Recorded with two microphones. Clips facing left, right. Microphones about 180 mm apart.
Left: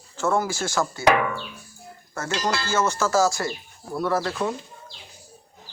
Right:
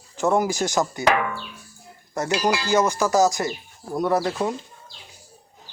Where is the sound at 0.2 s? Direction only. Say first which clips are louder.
Right 3 dB; 15° right (ahead or behind).